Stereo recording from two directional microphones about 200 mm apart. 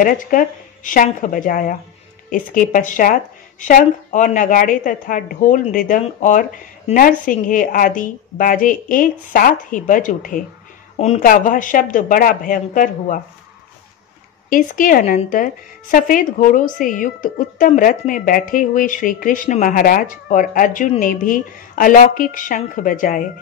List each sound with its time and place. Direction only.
0.0 s a woman's voice: 40° left (ahead or behind)
14.5 s a woman's voice: 40° left (ahead or behind)